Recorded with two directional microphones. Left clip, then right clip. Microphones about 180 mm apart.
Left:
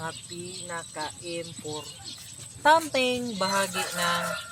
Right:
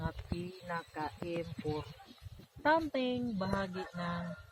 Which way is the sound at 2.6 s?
20° left (ahead or behind).